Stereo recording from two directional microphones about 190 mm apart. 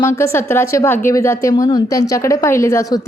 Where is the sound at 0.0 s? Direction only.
15° left (ahead or behind).